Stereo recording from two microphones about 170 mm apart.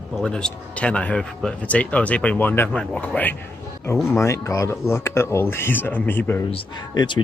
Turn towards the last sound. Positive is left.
turn(degrees=30)  # may be behind; listen again after turning